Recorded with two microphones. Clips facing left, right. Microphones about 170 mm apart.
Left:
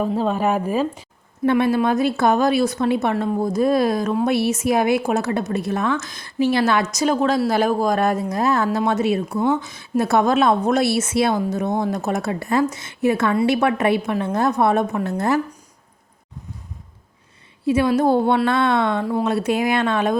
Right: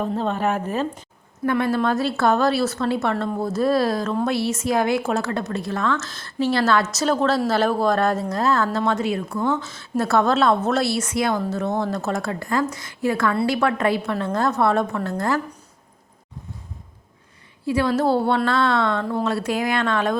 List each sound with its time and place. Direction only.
0.0 s speech: 5° left (ahead or behind)
17.7 s speech: 20° left (ahead or behind)